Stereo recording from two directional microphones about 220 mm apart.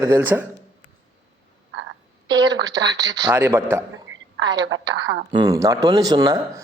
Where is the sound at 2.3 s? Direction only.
55° right (ahead or behind).